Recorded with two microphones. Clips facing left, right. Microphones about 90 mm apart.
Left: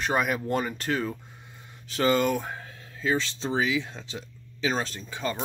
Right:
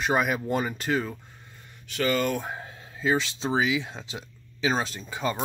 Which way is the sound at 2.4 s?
15° right (ahead or behind).